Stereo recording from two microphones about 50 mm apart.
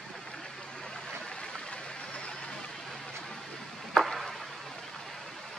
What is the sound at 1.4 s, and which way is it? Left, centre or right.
Stream, centre.